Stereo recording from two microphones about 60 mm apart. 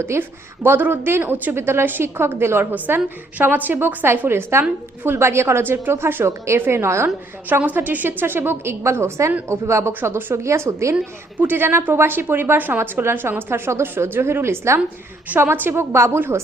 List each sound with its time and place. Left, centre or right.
0.0 s a woman's voice: right
2.7 s a woman's voice: right
6.2 s speech: right
7.6 s a woman's voice: right
10.3 s speech: right
11.3 s a woman's voice: right
15.4 s a woman's voice: right